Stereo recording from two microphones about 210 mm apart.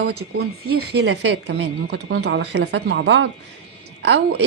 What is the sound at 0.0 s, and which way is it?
A woman's voice, 50° right (ahead or behind).